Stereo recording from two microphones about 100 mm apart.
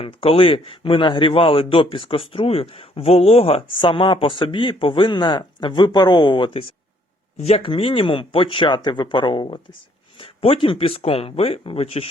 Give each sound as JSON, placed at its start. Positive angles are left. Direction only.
{"t": 0.0, "sound": "a man's voice", "side_deg": 65}
{"t": 7.4, "sound": "a man's voice", "side_deg": 75}